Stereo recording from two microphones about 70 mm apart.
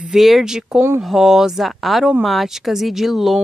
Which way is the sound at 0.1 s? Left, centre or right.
Centre.